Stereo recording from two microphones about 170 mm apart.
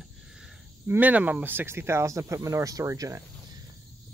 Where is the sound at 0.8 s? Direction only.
10° right (ahead or behind).